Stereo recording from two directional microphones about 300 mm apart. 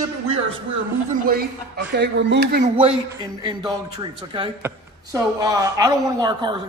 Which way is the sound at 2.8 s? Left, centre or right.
Centre.